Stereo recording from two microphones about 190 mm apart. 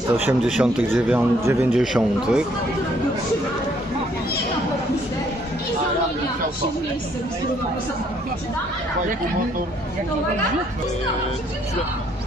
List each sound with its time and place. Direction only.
0.2 s a man's voice: 5° right (ahead or behind)
1.8 s a man's voice: 5° right (ahead or behind)